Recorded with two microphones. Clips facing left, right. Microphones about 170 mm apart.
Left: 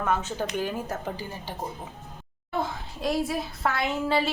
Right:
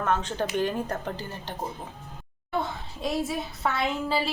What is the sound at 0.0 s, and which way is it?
A woman's voice, 10° left (ahead or behind).